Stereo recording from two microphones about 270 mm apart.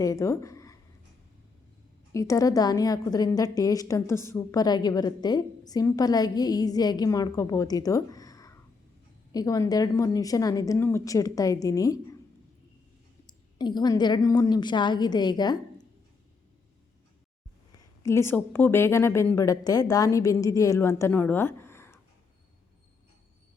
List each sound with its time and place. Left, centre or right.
0.0 s speech: centre
2.1 s a woman's voice: centre
13.2 s a woman's voice: centre
17.7 s a woman's voice: centre